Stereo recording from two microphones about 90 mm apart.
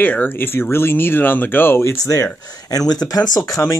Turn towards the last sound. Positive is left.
turn(degrees=40)  # may be behind; listen again after turning